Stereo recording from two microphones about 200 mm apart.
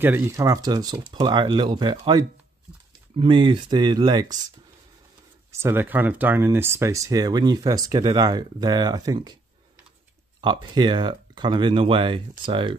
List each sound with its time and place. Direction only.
0.0 s speech: 15° right (ahead or behind)
5.5 s speech: 10° right (ahead or behind)
10.4 s speech: 25° right (ahead or behind)